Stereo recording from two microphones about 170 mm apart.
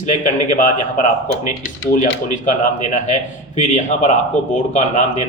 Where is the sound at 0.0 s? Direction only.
45° left (ahead or behind).